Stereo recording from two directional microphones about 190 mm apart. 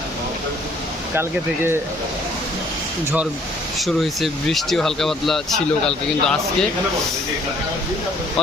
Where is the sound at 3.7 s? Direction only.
Centre (ahead or behind).